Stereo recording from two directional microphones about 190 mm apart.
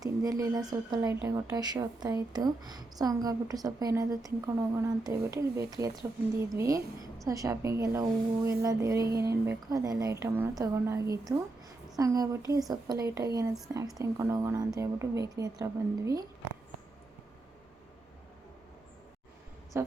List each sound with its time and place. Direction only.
0.0 s a woman's voice: 20° right (ahead or behind)
19.7 s a woman's voice: 15° right (ahead or behind)